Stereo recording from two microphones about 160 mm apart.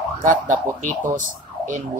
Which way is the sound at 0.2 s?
50° right (ahead or behind).